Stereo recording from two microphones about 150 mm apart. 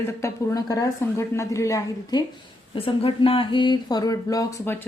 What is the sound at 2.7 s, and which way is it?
A woman's voice, 35° left (ahead or behind).